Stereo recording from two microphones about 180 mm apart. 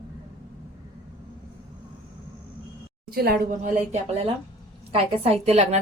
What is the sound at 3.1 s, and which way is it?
Speech, 60° right (ahead or behind).